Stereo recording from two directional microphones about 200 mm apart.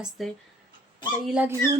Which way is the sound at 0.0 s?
Centre (ahead or behind).